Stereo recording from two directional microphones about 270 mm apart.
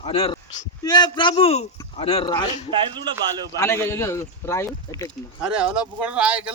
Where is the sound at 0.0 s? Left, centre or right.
Left.